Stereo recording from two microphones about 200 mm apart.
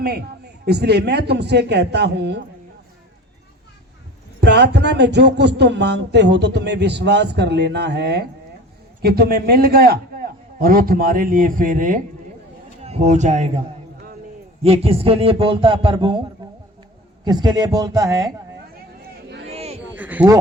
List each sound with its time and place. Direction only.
0.0 s a man's voice: 55° right (ahead or behind)
4.4 s a man's voice: 55° right (ahead or behind); by 13.5 s 35° right (ahead or behind)
14.6 s a man's voice: 30° right (ahead or behind)
17.2 s a man's voice: 20° right (ahead or behind)
19.5 s a sound: 30° right (ahead or behind)
20.0 s speech: 10° right (ahead or behind)